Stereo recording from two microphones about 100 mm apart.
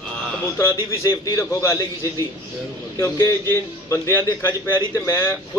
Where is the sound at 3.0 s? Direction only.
30° left (ahead or behind).